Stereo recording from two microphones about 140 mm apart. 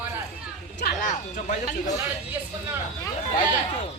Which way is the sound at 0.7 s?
60° left (ahead or behind).